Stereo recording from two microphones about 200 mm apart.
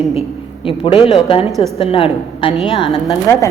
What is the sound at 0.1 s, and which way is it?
A woman's voice, 30° left (ahead or behind).